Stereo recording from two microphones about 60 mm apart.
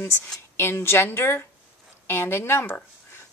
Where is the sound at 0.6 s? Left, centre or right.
Left.